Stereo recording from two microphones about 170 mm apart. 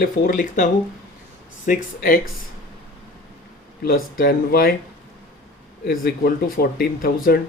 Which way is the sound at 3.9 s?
60° left (ahead or behind).